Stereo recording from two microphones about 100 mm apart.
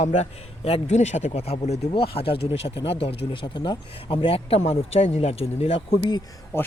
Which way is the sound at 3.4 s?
50° left (ahead or behind).